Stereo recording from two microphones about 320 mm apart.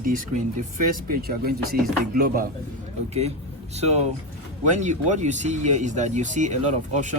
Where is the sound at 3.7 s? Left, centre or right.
Centre.